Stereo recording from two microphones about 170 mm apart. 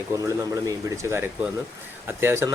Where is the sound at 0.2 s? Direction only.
20° right (ahead or behind).